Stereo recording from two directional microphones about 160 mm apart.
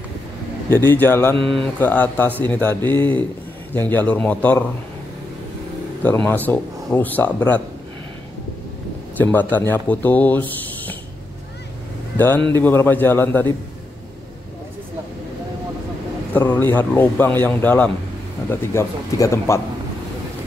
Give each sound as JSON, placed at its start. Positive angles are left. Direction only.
{"t": 0.7, "sound": "speech", "side_deg": 15}
{"t": 1.3, "sound": "mantra", "side_deg": -35}
{"t": 1.8, "sound": "speech", "side_deg": 10}
{"t": 6.0, "sound": "speech", "side_deg": 10}
{"t": 9.1, "sound": "speech", "side_deg": 10}
{"t": 12.5, "sound": "speech", "side_deg": 15}
{"t": 16.3, "sound": "speech", "side_deg": 10}